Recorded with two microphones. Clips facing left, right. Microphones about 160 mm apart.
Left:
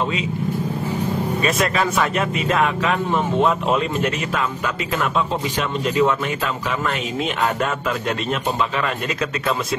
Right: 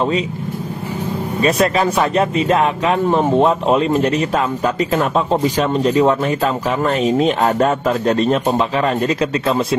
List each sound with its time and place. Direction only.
1.4 s speech: 35° right (ahead or behind)